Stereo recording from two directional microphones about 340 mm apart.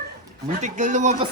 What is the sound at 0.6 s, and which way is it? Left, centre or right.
Speech, right.